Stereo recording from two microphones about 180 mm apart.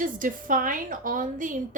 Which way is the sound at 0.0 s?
50° right (ahead or behind).